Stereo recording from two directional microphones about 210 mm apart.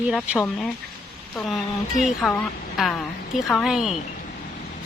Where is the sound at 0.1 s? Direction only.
Centre (ahead or behind).